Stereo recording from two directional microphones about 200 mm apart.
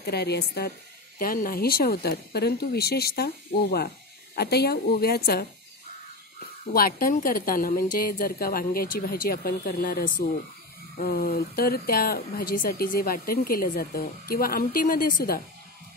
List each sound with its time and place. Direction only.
0.0 s speech: 55° left (ahead or behind)
4.4 s speech: 55° left (ahead or behind)
6.7 s speech: 45° left (ahead or behind)